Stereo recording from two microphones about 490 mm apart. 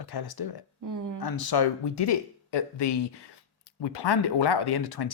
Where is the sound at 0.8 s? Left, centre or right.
Right.